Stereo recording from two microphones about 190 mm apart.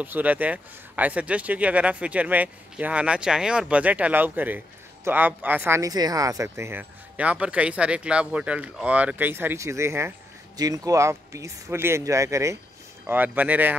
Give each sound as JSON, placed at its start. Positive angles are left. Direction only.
{"t": 0.0, "sound": "speech", "side_deg": -10}